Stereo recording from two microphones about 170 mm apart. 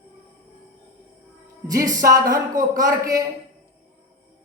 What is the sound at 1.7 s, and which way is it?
Speech, 20° right (ahead or behind).